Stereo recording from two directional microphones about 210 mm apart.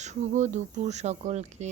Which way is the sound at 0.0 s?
35° right (ahead or behind).